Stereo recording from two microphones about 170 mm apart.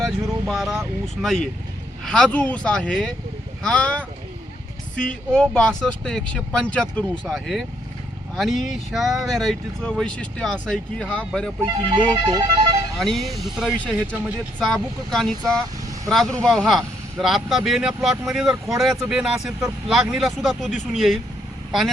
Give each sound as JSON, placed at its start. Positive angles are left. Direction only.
{"t": 0.0, "sound": "speech", "side_deg": 0}
{"t": 11.6, "sound": "speech", "side_deg": -30}
{"t": 13.0, "sound": "speech", "side_deg": 0}